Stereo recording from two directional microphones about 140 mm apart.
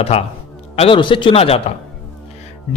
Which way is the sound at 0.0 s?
45° left (ahead or behind).